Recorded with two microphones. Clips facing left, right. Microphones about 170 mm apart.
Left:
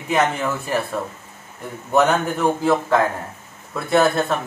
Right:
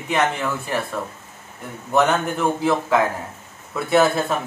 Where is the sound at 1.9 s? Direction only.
Centre (ahead or behind).